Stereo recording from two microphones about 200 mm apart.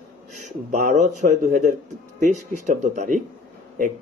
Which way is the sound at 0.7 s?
40° right (ahead or behind).